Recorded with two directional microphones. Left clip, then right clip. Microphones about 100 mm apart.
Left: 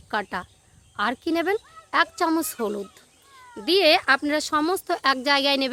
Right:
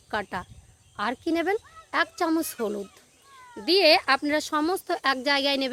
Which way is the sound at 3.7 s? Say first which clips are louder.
Left 1 dB; 25° left (ahead or behind).